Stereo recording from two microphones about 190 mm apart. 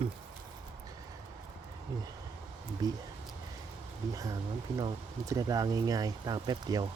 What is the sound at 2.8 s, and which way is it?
Speech, 20° right (ahead or behind).